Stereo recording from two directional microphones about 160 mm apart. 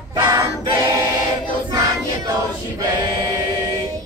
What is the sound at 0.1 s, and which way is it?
Choir, 25° right (ahead or behind).